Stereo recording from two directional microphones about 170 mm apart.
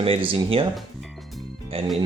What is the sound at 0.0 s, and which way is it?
Speech, 35° right (ahead or behind).